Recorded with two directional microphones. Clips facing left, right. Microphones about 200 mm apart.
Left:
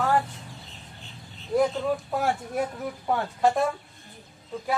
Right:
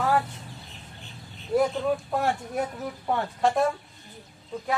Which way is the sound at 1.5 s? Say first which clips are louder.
Even; centre (ahead or behind).